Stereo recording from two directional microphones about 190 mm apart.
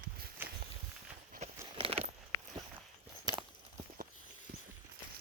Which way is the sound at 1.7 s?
30° right (ahead or behind).